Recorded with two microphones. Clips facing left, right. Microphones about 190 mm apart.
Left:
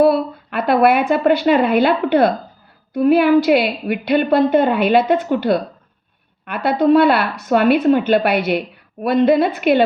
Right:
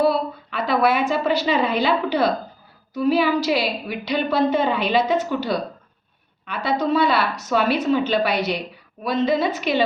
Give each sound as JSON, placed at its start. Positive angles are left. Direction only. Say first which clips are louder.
{"t": 0.0, "sound": "a woman's voice", "louder": "left 6 dB", "side_deg": 60}